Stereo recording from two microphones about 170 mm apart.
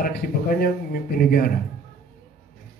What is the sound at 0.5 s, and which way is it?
Speech, 60° left (ahead or behind).